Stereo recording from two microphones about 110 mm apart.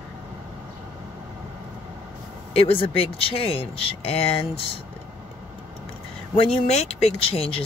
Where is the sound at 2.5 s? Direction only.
60° left (ahead or behind).